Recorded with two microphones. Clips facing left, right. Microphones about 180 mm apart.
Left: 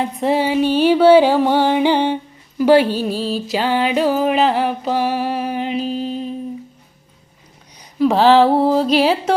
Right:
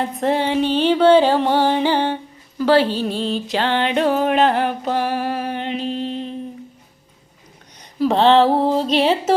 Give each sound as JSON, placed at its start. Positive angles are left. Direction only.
{"t": 0.0, "sound": "music", "side_deg": 0}
{"t": 5.0, "sound": "music", "side_deg": -50}
{"t": 5.4, "sound": "music", "side_deg": 5}
{"t": 7.9, "sound": "music", "side_deg": 0}